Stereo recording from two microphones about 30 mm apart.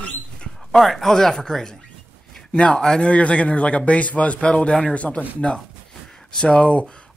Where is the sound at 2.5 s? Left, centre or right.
Left.